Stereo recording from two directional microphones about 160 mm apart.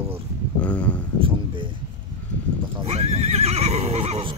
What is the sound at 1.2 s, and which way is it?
Speech, 35° right (ahead or behind).